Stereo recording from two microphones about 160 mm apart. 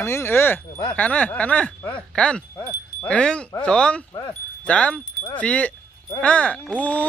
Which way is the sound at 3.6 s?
5° left (ahead or behind).